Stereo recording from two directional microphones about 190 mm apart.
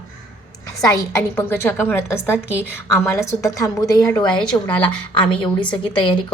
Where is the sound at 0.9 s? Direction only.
15° left (ahead or behind).